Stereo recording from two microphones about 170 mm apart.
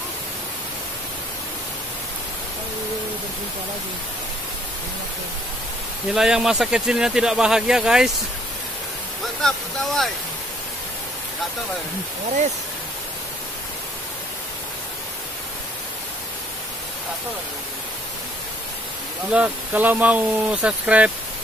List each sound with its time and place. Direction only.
6.1 s speech: centre (ahead or behind)
9.4 s speech: centre (ahead or behind)
19.3 s speech: 10° right (ahead or behind)